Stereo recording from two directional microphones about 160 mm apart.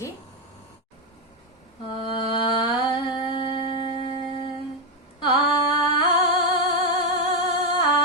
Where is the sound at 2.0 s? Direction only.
30° left (ahead or behind).